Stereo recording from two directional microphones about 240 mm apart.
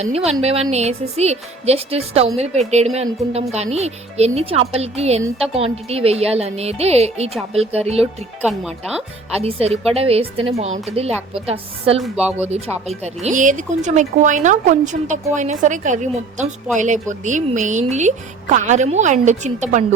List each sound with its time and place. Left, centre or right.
0.3 s speech: right
8.4 s speech: centre
9.4 s speech: right
12.0 s speech: centre
12.5 s speech: right